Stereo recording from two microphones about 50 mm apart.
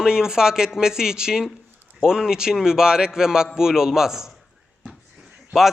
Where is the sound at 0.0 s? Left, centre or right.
Centre.